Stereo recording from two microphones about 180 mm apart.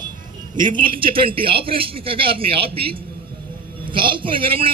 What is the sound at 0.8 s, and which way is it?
A man's voice, 30° right (ahead or behind).